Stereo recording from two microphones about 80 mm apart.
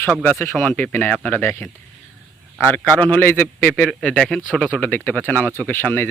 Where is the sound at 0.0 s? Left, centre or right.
Left.